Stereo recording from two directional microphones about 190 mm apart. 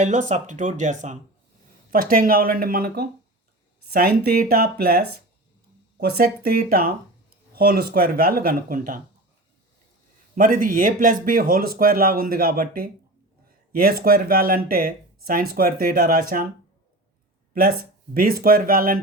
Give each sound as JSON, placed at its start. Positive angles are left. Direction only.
{"t": 0.0, "sound": "speech", "side_deg": -40}
{"t": 10.3, "sound": "speech", "side_deg": -45}
{"t": 17.5, "sound": "speech", "side_deg": -50}